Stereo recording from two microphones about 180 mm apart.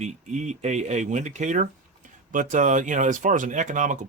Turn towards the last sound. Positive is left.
turn(degrees=-45)  # may be behind; listen again after turning